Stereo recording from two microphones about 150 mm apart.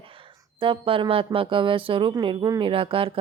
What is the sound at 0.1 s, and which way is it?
Speech, 35° right (ahead or behind).